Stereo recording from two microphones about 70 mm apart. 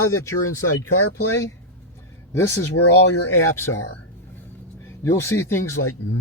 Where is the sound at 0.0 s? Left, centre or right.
Left.